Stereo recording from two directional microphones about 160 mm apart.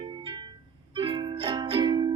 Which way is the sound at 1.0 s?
35° right (ahead or behind).